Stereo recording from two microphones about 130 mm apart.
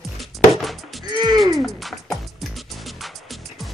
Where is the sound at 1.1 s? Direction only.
30° right (ahead or behind).